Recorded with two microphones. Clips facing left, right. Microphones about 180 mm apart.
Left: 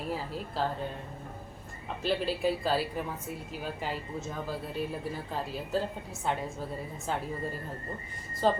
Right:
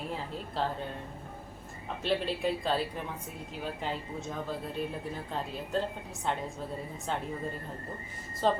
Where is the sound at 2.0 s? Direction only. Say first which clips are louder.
Left 1 dB; centre (ahead or behind).